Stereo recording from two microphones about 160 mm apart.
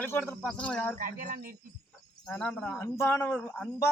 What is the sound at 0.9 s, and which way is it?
Speech, 55° right (ahead or behind).